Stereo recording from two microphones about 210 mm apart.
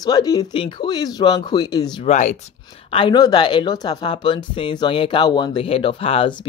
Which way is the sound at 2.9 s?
20° left (ahead or behind).